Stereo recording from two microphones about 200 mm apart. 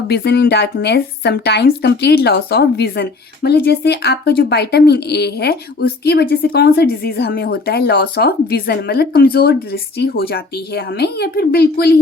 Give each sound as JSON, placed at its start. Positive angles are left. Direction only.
{"t": 0.1, "sound": "a woman's voice", "side_deg": 55}